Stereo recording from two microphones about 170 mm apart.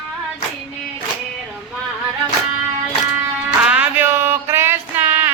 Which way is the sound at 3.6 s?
10° right (ahead or behind).